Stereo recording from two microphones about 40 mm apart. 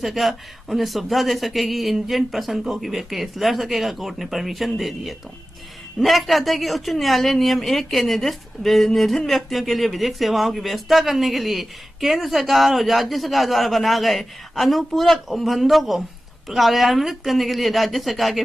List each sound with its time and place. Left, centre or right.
0.0 s a woman's voice: centre